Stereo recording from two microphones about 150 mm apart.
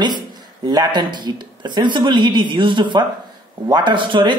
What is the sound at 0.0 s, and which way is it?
Speech, 30° right (ahead or behind).